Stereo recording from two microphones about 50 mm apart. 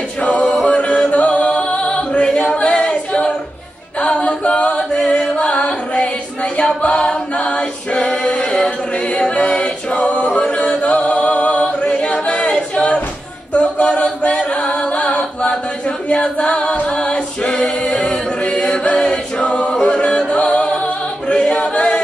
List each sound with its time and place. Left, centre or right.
0.4 s a capella: centre
0.7 s music: left
2.5 s a capella: left
16.1 s singing: left
16.8 s a capella: left